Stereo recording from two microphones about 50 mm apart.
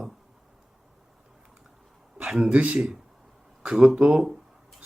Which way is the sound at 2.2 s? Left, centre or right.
Centre.